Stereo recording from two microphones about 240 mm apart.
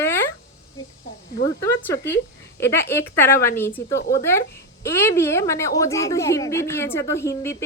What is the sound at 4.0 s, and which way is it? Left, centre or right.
Speech, left.